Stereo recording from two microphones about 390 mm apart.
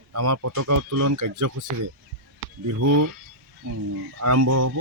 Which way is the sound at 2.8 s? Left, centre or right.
Right.